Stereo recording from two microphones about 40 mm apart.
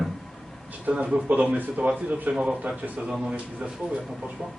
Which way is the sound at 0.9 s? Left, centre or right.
Right.